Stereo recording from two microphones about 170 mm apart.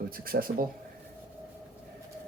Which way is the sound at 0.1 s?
60° right (ahead or behind).